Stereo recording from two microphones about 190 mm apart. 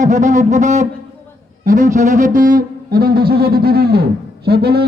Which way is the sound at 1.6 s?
40° right (ahead or behind).